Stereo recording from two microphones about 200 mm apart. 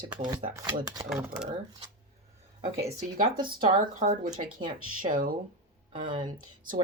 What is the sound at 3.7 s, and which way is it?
Speech, 45° right (ahead or behind).